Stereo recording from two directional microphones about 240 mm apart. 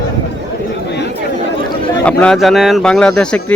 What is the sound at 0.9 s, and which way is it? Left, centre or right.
Chatter, left.